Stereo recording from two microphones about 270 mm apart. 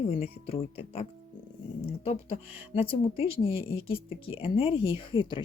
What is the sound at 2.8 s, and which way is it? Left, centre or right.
Speech, centre.